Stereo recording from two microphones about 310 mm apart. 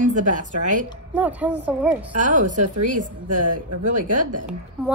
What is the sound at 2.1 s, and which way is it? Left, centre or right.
Speech, right.